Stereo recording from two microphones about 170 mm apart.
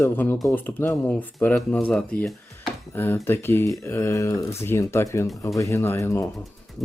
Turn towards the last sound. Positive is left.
turn(degrees=15)  # may be behind; listen again after turning